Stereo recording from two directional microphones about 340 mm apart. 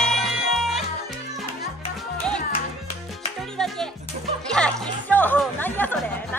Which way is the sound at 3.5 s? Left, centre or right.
Centre.